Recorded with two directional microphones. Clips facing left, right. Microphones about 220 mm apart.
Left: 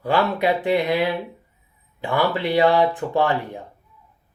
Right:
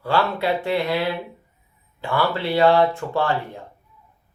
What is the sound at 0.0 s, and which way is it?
Speech, 15° left (ahead or behind).